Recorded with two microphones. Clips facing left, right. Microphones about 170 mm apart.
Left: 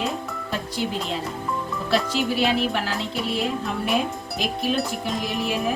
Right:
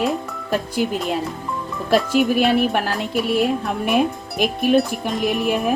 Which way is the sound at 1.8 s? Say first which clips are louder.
Right 7 dB; 50° right (ahead or behind).